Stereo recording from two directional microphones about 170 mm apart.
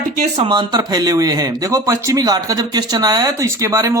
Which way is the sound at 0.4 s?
25° right (ahead or behind).